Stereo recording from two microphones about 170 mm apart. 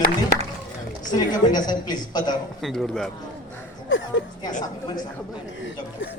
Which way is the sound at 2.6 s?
Centre (ahead or behind).